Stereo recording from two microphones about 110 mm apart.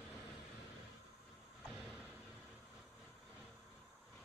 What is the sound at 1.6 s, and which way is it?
Vehicle, 5° right (ahead or behind).